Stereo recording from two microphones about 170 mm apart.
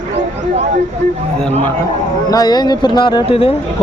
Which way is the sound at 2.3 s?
25° left (ahead or behind).